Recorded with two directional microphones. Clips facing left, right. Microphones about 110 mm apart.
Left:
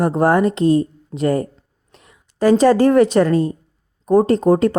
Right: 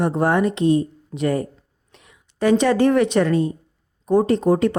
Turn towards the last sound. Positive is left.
turn(degrees=40)  # may be behind; listen again after turning